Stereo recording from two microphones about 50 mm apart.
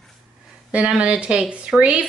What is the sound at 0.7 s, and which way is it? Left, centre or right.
Speech, right.